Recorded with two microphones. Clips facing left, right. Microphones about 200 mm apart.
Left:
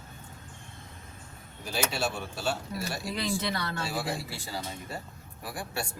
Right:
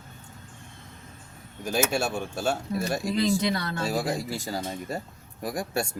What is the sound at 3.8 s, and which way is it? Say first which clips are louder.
Speech: right 6 dB; 45° right (ahead or behind).